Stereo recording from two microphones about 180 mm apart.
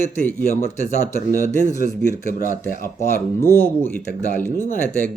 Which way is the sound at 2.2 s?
45° right (ahead or behind).